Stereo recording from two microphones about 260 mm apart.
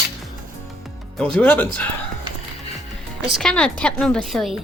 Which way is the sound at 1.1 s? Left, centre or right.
Centre.